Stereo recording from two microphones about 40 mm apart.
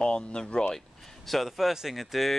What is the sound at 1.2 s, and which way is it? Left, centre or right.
Speech, centre.